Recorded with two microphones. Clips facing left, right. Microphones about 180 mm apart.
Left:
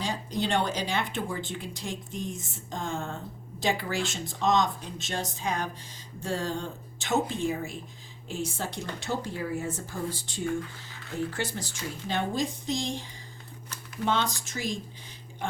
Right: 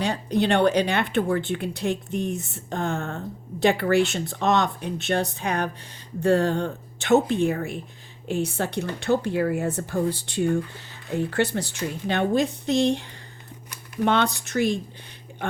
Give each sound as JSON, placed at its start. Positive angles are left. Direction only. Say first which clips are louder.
{"t": 0.0, "sound": "speech", "louder": "right 7 dB", "side_deg": -65}